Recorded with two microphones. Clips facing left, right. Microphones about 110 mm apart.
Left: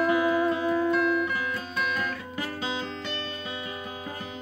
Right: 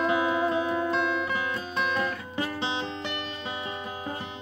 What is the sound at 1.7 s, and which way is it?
Guitar, 30° right (ahead or behind).